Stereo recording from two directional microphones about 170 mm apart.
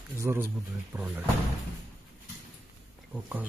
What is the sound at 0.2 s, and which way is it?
Speech, 15° right (ahead or behind).